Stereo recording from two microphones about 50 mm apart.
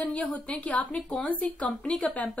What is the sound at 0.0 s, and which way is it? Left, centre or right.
Speech, left.